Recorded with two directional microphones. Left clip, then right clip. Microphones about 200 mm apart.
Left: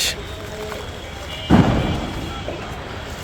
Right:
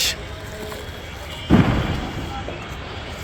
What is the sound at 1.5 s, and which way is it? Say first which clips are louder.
Thump: left 2 dB; 35° left (ahead or behind).